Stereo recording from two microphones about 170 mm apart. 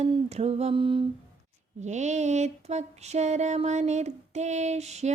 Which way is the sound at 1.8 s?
45° right (ahead or behind).